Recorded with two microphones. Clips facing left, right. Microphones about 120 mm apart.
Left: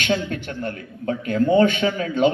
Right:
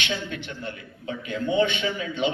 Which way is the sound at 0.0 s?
45° left (ahead or behind).